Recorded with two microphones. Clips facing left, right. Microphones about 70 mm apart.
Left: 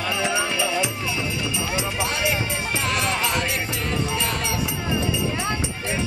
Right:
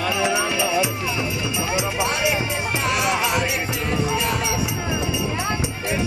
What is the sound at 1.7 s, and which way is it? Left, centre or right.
Speech, centre.